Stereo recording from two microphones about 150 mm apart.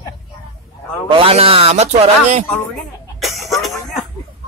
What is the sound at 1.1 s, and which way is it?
Speech, 40° right (ahead or behind).